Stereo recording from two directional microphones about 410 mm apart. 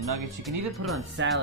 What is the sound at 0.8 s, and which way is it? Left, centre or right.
Speech, right.